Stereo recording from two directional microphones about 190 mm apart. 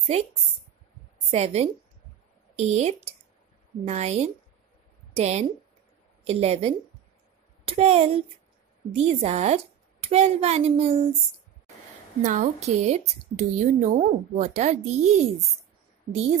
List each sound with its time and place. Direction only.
0.0 s a woman's voice: 35° right (ahead or behind)
12.2 s a woman's voice: 40° right (ahead or behind)